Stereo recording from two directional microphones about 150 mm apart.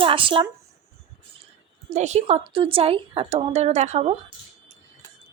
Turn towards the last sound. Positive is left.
turn(degrees=-45)  # may be behind; listen again after turning